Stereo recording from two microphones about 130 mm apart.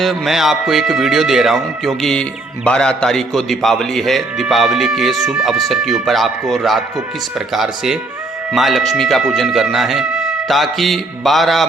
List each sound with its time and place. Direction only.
0.0 s a man's voice: centre (ahead or behind)